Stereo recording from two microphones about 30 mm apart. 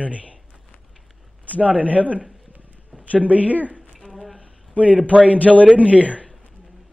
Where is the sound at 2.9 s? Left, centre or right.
Right.